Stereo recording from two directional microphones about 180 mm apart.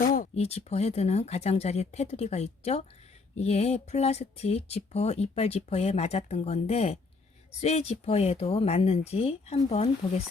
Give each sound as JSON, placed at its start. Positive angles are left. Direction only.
{"t": 0.3, "sound": "speech", "side_deg": 35}